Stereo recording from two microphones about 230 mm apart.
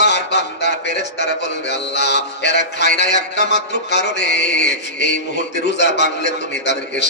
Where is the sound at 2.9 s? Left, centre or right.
Left.